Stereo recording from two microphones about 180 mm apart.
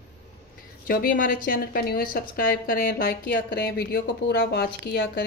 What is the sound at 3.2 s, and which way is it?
Speech, 70° left (ahead or behind).